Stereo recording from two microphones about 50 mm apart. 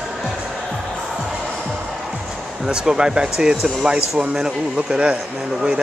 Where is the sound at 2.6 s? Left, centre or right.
Centre.